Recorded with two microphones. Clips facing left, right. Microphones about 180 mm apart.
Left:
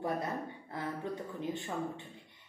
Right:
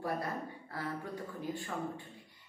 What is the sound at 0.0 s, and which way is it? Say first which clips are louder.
A woman's voice: left 2 dB; 20° left (ahead or behind).